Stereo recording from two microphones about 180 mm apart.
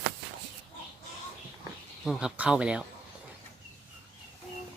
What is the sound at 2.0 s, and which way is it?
Speech, 5° right (ahead or behind).